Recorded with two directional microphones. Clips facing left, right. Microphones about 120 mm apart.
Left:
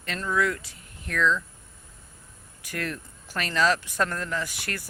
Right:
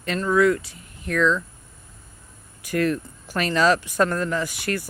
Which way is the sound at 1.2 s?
45° right (ahead or behind).